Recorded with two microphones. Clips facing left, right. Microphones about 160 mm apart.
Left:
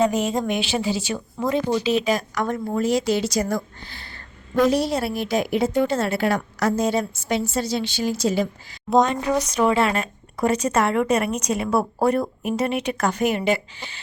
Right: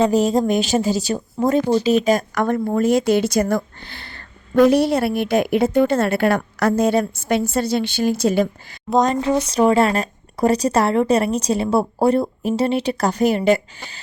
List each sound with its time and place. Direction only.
0.0 s a woman's voice: 35° right (ahead or behind); by 8.8 s 55° right (ahead or behind)
9.0 s a woman's voice: 35° right (ahead or behind)